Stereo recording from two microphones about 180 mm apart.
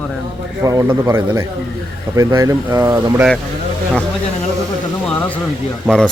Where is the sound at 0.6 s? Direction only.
20° right (ahead or behind).